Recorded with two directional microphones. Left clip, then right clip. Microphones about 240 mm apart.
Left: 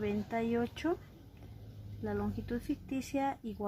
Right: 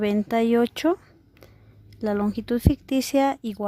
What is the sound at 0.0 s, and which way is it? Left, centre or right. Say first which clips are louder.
Speech: right 13 dB; right.